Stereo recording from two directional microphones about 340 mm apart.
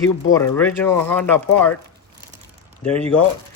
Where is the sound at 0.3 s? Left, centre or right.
Centre.